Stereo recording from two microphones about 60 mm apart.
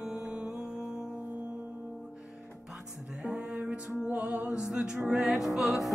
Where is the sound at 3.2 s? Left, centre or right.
Centre.